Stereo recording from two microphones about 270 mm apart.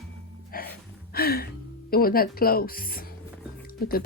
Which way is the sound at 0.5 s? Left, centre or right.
Left.